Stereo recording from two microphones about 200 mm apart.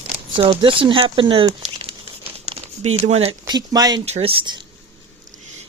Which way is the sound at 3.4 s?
20° right (ahead or behind).